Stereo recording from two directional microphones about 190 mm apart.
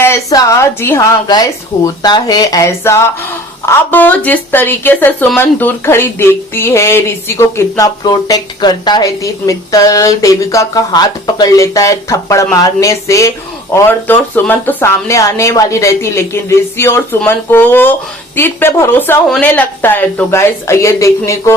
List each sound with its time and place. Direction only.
0.0 s speech: 15° left (ahead or behind)